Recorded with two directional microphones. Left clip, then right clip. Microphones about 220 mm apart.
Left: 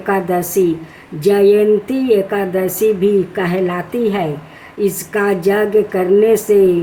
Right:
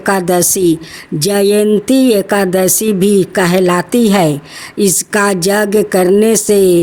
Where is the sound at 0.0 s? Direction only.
50° right (ahead or behind).